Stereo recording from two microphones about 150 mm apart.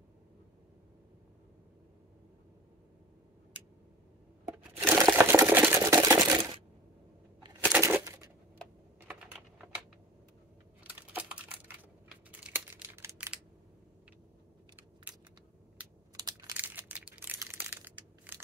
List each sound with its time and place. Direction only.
4.8 s sewing machine: 15° right (ahead or behind)
7.6 s a sound: 10° right (ahead or behind)
9.0 s typing: 5° right (ahead or behind)
10.8 s typing: 10° right (ahead or behind)
12.3 s a sound: 10° right (ahead or behind)
16.3 s computer keyboard: 25° right (ahead or behind)
16.5 s crushing: 10° right (ahead or behind)